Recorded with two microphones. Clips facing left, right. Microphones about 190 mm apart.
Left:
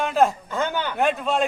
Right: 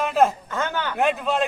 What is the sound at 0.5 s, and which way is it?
Speech, 15° left (ahead or behind).